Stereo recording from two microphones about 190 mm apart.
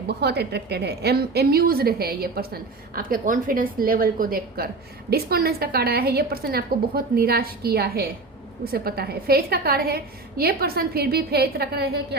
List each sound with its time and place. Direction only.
0.1 s a woman's voice: 60° right (ahead or behind)